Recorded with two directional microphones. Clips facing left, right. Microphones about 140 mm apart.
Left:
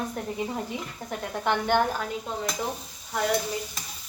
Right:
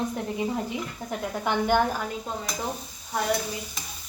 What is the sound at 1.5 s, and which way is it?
Speech, 10° right (ahead or behind).